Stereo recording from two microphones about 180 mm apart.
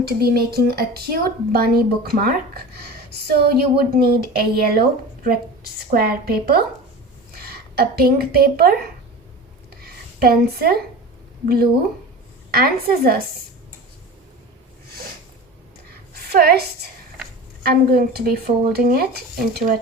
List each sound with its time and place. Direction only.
0.0 s a woman's voice: 60° right (ahead or behind)
9.8 s a sound: 60° right (ahead or behind)
11.4 s speech: 55° right (ahead or behind)
16.1 s a woman's voice: 60° right (ahead or behind)